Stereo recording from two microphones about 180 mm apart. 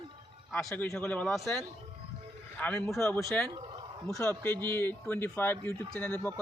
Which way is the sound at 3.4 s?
20° right (ahead or behind).